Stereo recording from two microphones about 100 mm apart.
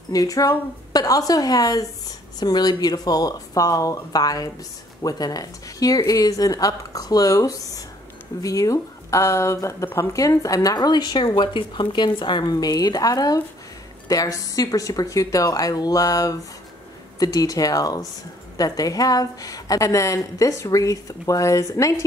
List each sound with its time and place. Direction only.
0.1 s speech: 35° left (ahead or behind)